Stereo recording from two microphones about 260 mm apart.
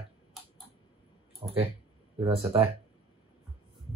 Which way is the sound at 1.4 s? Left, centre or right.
Right.